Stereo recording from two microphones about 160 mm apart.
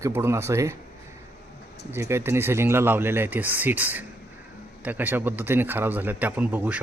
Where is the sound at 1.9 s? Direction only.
15° right (ahead or behind).